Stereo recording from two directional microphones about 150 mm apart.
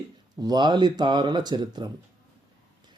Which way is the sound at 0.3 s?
30° right (ahead or behind).